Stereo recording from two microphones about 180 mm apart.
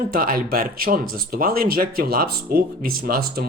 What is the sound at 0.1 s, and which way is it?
Speech, 50° right (ahead or behind).